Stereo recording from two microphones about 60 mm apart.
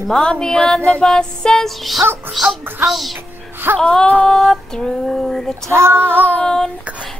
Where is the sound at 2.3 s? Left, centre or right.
Centre.